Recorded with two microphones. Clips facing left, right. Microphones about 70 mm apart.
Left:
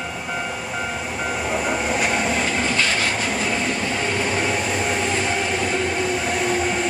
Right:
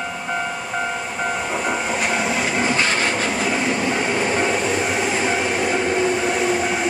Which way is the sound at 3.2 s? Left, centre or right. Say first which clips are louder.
Right 2 dB; centre.